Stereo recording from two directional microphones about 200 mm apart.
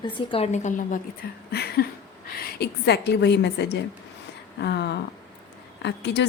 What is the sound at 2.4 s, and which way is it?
A woman's voice, 50° left (ahead or behind).